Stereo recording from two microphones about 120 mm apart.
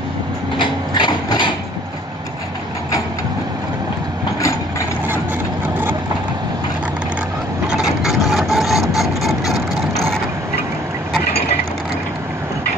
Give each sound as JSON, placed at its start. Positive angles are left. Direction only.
{"t": 0.6, "sound": "printer", "side_deg": 35}
{"t": 7.6, "sound": "vehicle", "side_deg": -5}